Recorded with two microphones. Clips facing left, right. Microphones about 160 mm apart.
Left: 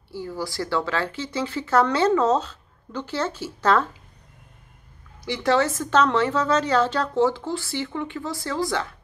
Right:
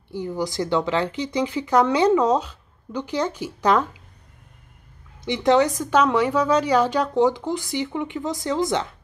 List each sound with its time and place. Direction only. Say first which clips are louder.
0.1 s speech: right 4 dB; 20° right (ahead or behind)
5.2 s speech: right 3 dB; 20° right (ahead or behind)